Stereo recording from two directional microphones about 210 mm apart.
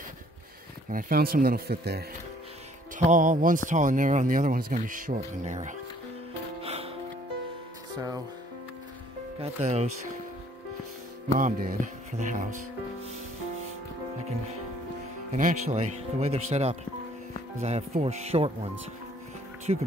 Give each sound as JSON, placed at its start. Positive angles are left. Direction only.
{"t": 0.8, "sound": "speech", "side_deg": -40}
{"t": 3.1, "sound": "speech", "side_deg": -40}
{"t": 6.6, "sound": "music", "side_deg": -30}
{"t": 9.4, "sound": "speech", "side_deg": -30}
{"t": 11.3, "sound": "speech", "side_deg": -40}
{"t": 15.3, "sound": "speech", "side_deg": -35}
{"t": 19.7, "sound": "speech", "side_deg": -25}